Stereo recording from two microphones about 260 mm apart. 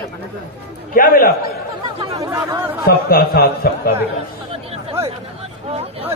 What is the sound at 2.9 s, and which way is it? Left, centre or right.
A man's voice, left.